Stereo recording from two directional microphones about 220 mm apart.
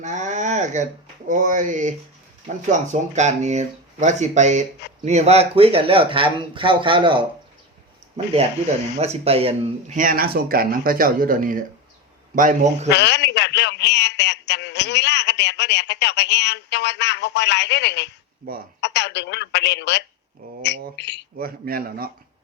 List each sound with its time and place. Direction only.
0.0 s speech: 35° right (ahead or behind)
12.9 s a man's voice: 50° left (ahead or behind)
20.6 s a sound: 50° left (ahead or behind)
21.3 s speech: 40° right (ahead or behind)